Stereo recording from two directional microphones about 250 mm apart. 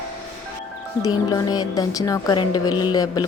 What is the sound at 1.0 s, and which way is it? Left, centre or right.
Speech, centre.